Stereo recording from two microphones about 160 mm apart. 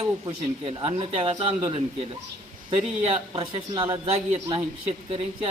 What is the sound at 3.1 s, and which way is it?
A man's voice, 35° right (ahead or behind).